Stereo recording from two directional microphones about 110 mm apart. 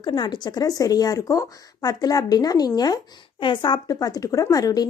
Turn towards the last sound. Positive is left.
turn(degrees=35)  # may be behind; listen again after turning